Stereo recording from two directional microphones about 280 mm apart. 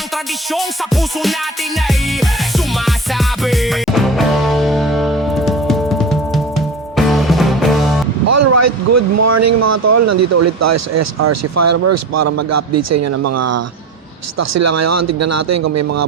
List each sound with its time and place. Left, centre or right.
0.5 s music: centre
2.7 s music: centre
8.3 s a sound: right
11.2 s speech: right